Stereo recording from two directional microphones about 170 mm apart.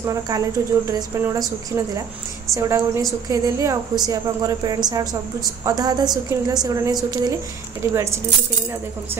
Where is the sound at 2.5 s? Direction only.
20° right (ahead or behind).